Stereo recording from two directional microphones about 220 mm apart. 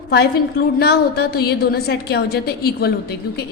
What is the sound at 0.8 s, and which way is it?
A woman's voice, 45° left (ahead or behind).